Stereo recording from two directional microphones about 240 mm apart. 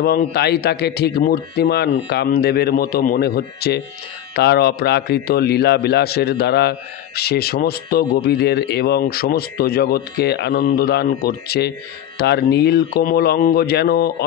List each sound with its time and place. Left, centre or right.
0.0 s a man's voice: left